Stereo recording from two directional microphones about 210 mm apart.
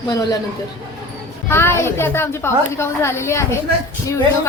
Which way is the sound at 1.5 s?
10° left (ahead or behind).